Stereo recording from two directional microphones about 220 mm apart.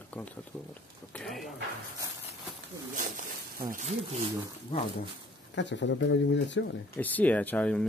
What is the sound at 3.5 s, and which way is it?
Speech, 35° right (ahead or behind).